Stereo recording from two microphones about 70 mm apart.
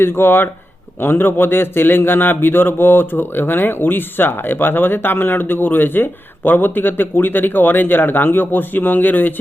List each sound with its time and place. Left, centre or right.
0.0 s a man's voice: left